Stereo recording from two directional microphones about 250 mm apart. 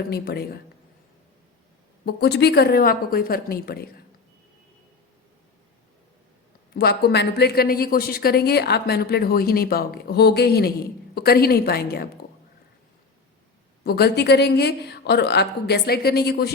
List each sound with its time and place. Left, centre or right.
0.1 s a woman's voice: left
2.0 s a woman's voice: left
6.7 s a woman's voice: left
13.8 s a woman's voice: left